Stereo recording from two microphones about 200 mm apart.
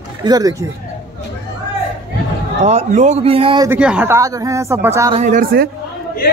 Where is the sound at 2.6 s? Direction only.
35° right (ahead or behind).